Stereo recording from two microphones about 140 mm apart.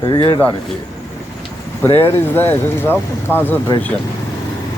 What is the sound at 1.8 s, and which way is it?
Speech, 15° left (ahead or behind).